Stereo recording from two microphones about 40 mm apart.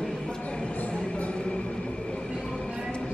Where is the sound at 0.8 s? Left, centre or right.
Left.